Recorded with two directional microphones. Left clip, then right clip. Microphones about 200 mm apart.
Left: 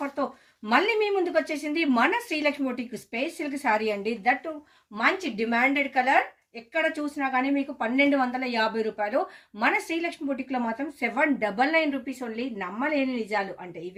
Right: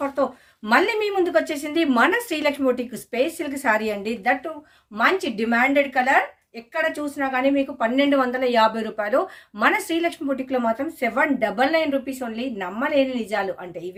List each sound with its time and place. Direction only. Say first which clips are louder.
0.6 s a woman's voice: right 4 dB; 25° right (ahead or behind)
7.2 s a woman's voice: right 5 dB; 20° right (ahead or behind)